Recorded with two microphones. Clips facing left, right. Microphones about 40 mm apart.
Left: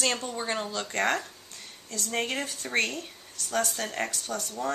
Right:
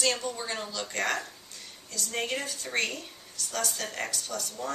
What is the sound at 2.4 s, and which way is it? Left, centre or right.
Speech, left.